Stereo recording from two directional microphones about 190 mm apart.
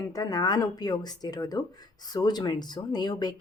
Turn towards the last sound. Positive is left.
turn(degrees=20)  # may be behind; listen again after turning